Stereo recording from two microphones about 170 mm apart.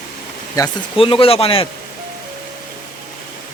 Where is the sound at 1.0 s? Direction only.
30° left (ahead or behind).